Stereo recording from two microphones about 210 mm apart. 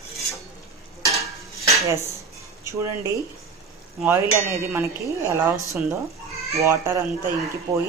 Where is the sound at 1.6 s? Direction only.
15° right (ahead or behind).